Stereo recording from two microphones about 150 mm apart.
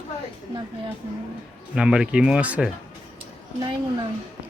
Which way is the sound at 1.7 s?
5° right (ahead or behind).